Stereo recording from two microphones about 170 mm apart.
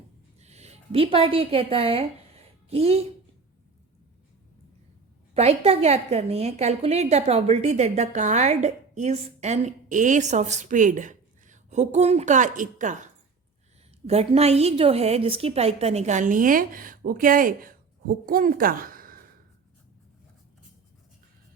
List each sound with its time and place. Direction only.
0.3 s a sound: 40° right (ahead or behind)
5.3 s a woman's voice: 35° right (ahead or behind)
14.1 s a woman's voice: 40° right (ahead or behind); by 19.2 s 55° right (ahead or behind)